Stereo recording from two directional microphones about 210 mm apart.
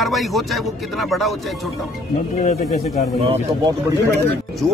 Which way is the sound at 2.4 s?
30° left (ahead or behind).